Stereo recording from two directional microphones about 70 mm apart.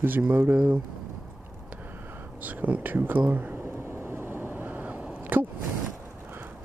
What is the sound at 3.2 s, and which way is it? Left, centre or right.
Vehicle, right.